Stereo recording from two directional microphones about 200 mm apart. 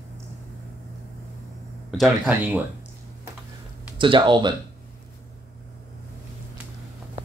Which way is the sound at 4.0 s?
25° right (ahead or behind).